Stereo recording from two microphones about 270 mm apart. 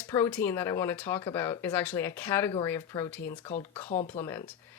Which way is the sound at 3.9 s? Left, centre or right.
Left.